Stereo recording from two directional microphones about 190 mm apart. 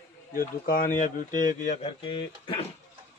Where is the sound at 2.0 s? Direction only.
25° left (ahead or behind).